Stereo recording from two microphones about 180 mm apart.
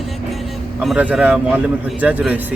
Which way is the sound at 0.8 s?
5° right (ahead or behind).